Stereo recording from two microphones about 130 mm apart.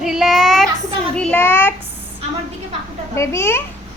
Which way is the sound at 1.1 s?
10° left (ahead or behind).